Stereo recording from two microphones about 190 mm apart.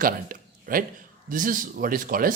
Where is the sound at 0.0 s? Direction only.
50° right (ahead or behind).